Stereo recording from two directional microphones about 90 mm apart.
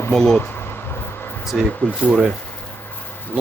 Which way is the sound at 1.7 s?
15° left (ahead or behind).